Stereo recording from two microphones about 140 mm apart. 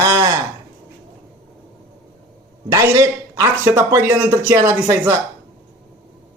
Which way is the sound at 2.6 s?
20° right (ahead or behind).